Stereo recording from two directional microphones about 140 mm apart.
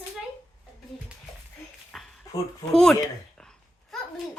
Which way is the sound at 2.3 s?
25° left (ahead or behind).